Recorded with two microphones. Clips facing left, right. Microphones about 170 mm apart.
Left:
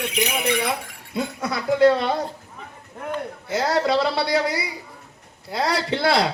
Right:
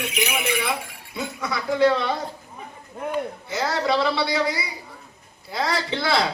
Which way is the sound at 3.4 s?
50° left (ahead or behind).